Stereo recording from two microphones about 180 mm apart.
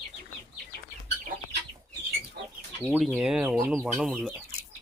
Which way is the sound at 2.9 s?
Centre (ahead or behind).